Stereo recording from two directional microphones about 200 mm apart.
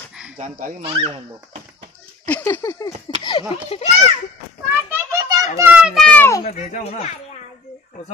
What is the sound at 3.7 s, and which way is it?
Speech, 35° left (ahead or behind).